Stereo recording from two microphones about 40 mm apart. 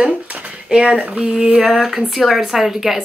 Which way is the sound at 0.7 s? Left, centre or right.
Right.